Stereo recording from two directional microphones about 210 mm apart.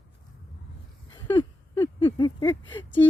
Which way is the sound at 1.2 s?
15° left (ahead or behind).